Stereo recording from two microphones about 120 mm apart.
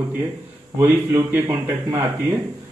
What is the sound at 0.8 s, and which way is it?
Speech, 20° right (ahead or behind).